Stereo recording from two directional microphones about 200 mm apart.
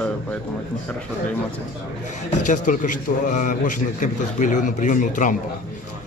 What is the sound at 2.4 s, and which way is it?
A man's voice, 40° left (ahead or behind).